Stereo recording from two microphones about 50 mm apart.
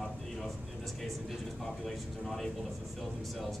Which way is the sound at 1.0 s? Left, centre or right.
Centre.